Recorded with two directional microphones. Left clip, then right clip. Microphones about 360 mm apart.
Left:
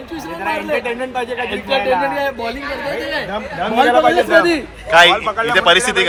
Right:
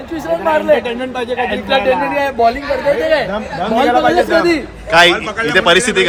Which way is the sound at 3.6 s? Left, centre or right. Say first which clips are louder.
Even; left.